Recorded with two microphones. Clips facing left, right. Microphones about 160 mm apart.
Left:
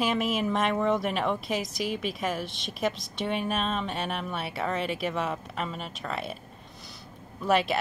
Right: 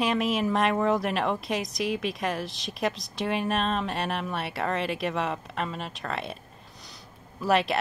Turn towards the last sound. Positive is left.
turn(degrees=0)  # may be behind; listen again after turning